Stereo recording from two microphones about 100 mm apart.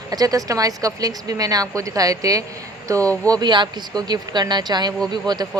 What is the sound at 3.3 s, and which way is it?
Speech, 50° right (ahead or behind).